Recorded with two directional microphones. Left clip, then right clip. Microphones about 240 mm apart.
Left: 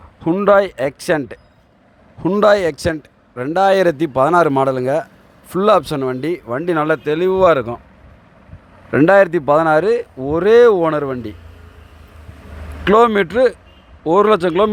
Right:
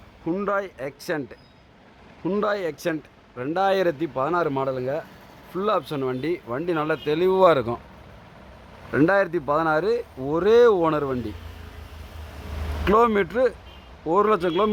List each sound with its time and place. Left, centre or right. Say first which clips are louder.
0.3 s speech: left 13 dB; left
8.9 s speech: left 9 dB; centre
12.8 s speech: left 7 dB; centre